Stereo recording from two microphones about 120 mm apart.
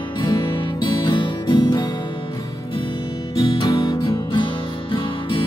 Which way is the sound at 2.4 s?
30° left (ahead or behind).